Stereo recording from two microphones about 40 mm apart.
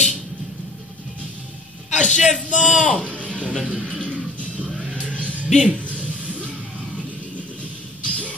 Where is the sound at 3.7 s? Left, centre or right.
Left.